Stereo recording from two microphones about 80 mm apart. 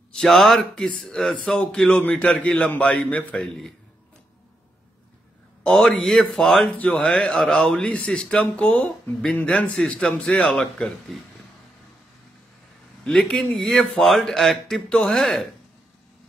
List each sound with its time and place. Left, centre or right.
0.1 s a man's voice: centre
3.4 s a man's voice: centre
5.6 s speech: centre
11.1 s a man's voice: centre
13.0 s a man's voice: centre